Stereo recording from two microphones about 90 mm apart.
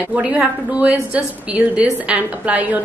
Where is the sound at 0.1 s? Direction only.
15° right (ahead or behind).